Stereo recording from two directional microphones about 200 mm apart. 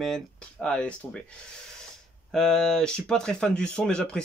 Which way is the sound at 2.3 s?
Centre (ahead or behind).